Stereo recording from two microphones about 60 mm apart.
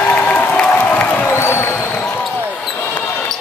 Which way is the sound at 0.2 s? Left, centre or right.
Left.